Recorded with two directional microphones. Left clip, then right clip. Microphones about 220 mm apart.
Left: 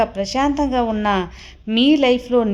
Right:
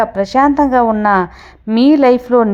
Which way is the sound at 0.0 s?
15° right (ahead or behind).